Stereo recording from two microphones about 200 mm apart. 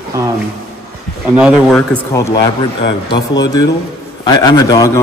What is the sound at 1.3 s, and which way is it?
Speech, 5° right (ahead or behind).